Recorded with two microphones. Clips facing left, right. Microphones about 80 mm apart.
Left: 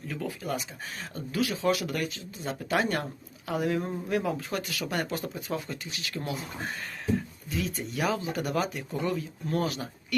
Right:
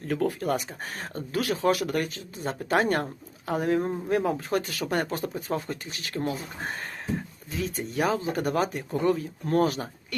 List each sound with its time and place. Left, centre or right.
0.1 s speech: right